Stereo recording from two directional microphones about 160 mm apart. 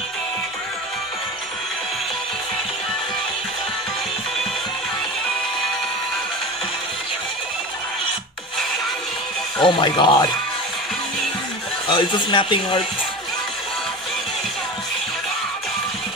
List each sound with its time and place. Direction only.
9.6 s speech: 30° left (ahead or behind)
11.9 s speech: 30° left (ahead or behind)